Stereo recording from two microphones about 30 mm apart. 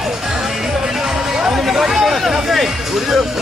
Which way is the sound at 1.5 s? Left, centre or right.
Centre.